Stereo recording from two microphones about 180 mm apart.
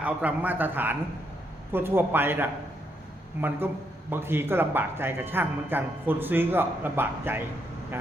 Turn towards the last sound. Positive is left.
turn(degrees=-10)  # may be behind; listen again after turning